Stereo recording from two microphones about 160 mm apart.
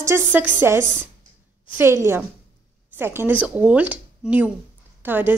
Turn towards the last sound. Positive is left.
turn(degrees=-10)  # may be behind; listen again after turning